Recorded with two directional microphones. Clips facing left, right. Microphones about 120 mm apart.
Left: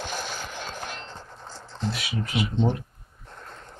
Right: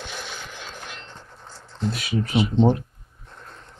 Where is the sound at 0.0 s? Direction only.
40° left (ahead or behind).